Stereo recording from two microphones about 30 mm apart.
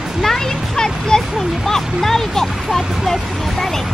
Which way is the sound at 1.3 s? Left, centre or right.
Centre.